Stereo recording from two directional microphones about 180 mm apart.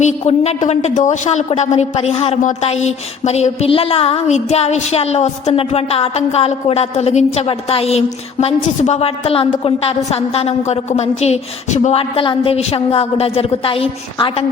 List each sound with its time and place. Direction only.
0.0 s a woman's voice: 40° left (ahead or behind)